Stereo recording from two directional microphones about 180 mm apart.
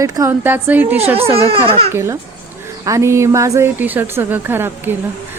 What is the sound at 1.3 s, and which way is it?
Speech, 30° right (ahead or behind).